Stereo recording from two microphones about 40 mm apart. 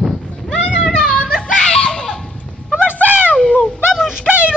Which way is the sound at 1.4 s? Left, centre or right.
Centre.